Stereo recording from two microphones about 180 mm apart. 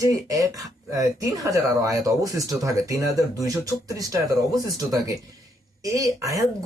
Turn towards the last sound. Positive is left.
turn(degrees=-20)  # may be behind; listen again after turning